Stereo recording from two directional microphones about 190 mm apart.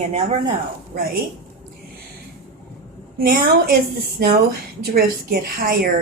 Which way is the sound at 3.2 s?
50° right (ahead or behind).